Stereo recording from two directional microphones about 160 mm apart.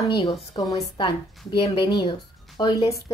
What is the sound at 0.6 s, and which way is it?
A woman's voice, 25° left (ahead or behind).